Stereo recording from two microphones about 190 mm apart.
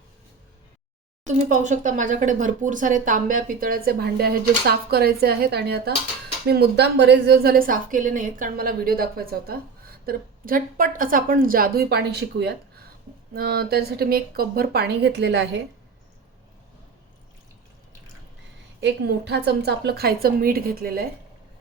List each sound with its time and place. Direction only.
1.3 s a woman's voice: 40° right (ahead or behind); by 15.6 s 65° right (ahead or behind)
18.8 s speech: 65° right (ahead or behind)